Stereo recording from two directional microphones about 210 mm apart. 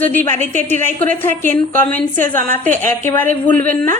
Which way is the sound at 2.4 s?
35° right (ahead or behind).